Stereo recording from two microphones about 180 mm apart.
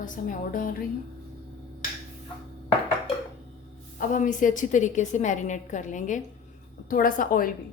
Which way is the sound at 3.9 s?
45° left (ahead or behind).